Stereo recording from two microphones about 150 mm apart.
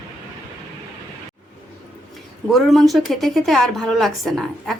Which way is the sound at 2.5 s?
Centre (ahead or behind).